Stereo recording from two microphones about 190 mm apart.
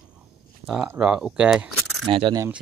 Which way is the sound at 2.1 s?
30° right (ahead or behind).